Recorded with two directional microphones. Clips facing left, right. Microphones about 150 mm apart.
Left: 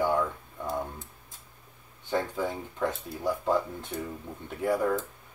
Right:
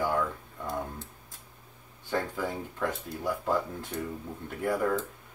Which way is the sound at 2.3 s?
20° left (ahead or behind).